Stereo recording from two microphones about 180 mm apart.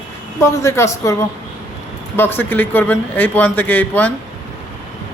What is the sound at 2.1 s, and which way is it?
A man's voice, 10° left (ahead or behind).